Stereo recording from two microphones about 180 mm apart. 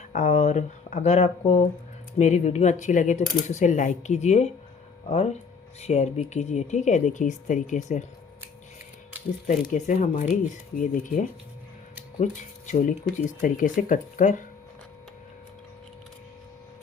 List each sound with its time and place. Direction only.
0.1 s speech: 40° left (ahead or behind)
9.5 s speech: 40° left (ahead or behind)